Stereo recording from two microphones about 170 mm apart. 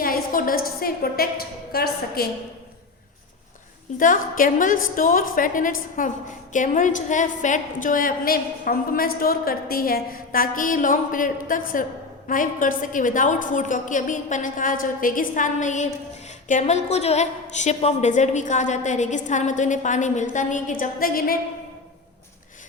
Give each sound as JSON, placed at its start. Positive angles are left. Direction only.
{"t": 0.0, "sound": "a woman's voice", "side_deg": 55}
{"t": 3.9, "sound": "a woman's voice", "side_deg": 50}